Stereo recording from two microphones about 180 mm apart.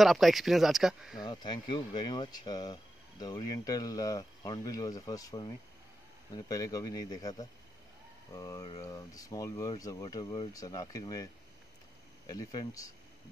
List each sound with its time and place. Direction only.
0.0 s speech: centre (ahead or behind)
1.2 s speech: 25° left (ahead or behind)
12.3 s speech: 20° left (ahead or behind)